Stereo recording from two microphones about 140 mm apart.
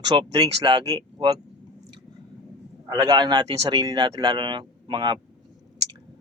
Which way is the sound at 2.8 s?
25° right (ahead or behind).